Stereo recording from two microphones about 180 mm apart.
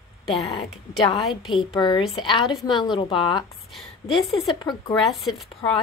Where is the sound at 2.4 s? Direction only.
Centre (ahead or behind).